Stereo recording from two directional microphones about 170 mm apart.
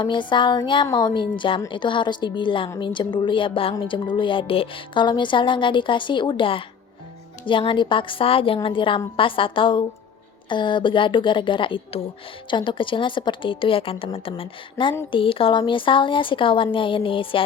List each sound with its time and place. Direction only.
0.0 s a woman's voice: 30° left (ahead or behind)